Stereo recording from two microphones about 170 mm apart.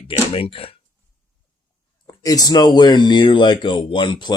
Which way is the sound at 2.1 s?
20° left (ahead or behind).